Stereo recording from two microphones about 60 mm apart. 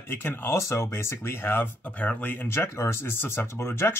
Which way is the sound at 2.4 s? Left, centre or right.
Left.